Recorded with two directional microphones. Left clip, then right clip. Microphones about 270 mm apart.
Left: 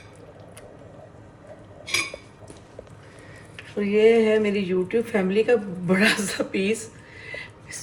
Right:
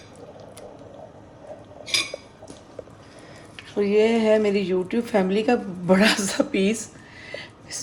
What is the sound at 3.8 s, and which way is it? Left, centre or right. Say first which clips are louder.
A woman's voice: left 2 dB; right.